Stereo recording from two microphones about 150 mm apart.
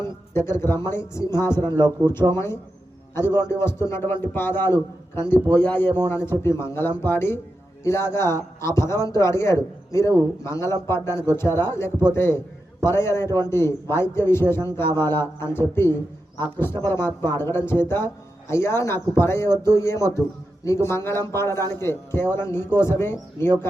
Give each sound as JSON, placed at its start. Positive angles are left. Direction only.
{"t": 0.0, "sound": "speech", "side_deg": 15}